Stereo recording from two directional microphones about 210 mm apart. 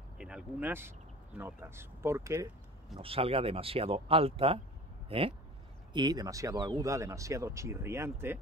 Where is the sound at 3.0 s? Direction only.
25° right (ahead or behind).